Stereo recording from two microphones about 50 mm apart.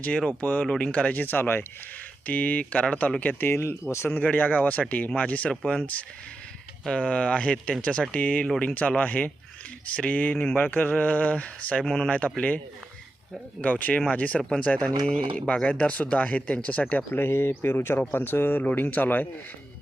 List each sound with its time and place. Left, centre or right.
0.3 s speech: left
0.7 s speech: left
1.2 s speech: left
2.2 s speech: left
3.4 s speech: left
4.1 s speech: left
6.9 s speech: left
10.3 s speech: centre
10.6 s speech: left
13.6 s speech: left
17.1 s speech: left
18.6 s speech: left